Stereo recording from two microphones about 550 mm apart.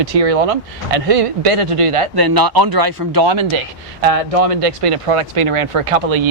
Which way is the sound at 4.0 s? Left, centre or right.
Right.